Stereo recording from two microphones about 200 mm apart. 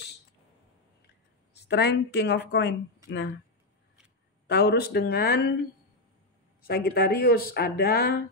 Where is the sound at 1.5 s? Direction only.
55° left (ahead or behind).